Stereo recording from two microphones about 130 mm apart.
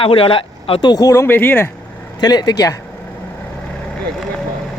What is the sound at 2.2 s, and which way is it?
Speech, 30° left (ahead or behind).